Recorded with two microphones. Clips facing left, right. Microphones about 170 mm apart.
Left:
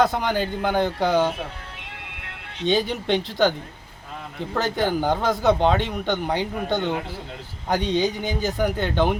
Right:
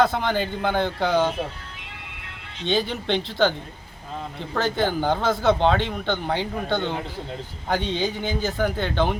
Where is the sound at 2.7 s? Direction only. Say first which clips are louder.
Left 1 dB; 10° left (ahead or behind).